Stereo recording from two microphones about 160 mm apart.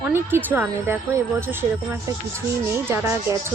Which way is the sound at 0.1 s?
15° right (ahead or behind).